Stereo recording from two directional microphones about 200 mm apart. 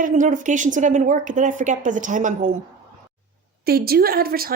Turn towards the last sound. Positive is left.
turn(degrees=-50)  # may be behind; listen again after turning